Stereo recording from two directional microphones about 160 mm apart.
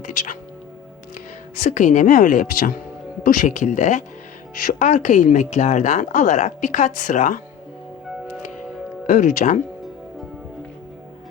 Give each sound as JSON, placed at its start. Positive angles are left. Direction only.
{"t": 0.0, "sound": "speech", "side_deg": 50}
{"t": 1.5, "sound": "a woman's voice", "side_deg": 50}
{"t": 9.0, "sound": "a woman's voice", "side_deg": 55}